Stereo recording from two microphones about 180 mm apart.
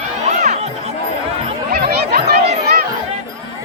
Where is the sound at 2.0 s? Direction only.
60° right (ahead or behind).